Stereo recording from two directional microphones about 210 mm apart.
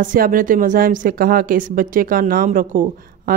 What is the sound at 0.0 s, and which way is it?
A woman's voice, 40° right (ahead or behind).